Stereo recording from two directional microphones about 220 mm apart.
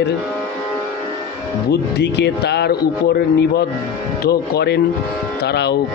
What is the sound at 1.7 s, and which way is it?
Speech, 50° left (ahead or behind).